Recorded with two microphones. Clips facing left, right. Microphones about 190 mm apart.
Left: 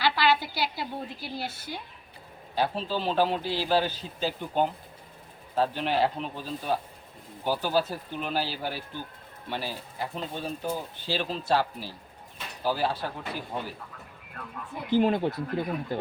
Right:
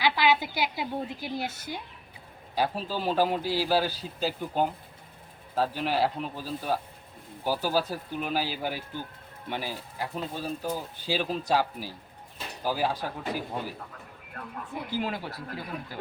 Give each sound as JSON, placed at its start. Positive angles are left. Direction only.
{"t": 0.0, "sound": "a woman's voice", "side_deg": -15}
{"t": 14.8, "sound": "speech", "side_deg": 25}